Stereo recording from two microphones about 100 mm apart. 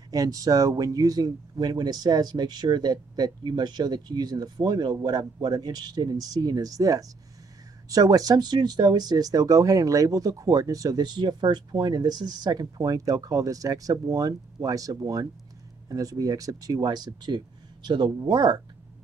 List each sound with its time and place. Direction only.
0.1 s speech: 35° right (ahead or behind)